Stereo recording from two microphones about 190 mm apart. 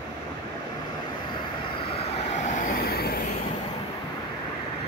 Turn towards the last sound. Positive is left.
turn(degrees=55)  # may be behind; listen again after turning